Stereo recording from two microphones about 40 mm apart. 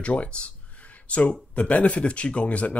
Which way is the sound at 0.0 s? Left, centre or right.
Left.